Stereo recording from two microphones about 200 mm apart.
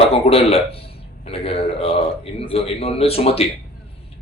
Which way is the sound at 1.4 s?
30° left (ahead or behind).